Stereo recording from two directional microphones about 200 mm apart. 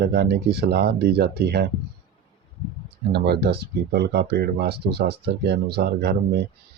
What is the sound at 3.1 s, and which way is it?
Speech, 55° right (ahead or behind).